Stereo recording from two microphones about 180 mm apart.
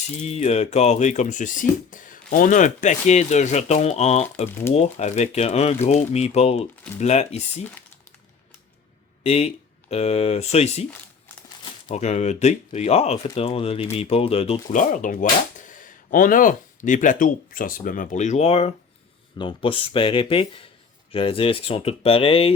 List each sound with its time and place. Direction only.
0.2 s speech: 35° left (ahead or behind)
9.2 s speech: 35° left (ahead or behind)
11.9 s speech: 40° left (ahead or behind)